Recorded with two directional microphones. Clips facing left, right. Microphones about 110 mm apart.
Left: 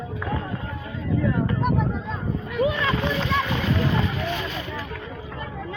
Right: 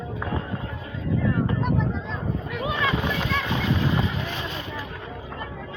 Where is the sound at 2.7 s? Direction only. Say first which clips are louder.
Left 1 dB; 15° right (ahead or behind).